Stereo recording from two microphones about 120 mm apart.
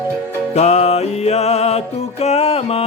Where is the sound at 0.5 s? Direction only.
65° left (ahead or behind).